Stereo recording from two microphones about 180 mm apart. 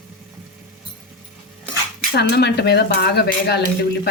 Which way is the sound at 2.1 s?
65° left (ahead or behind).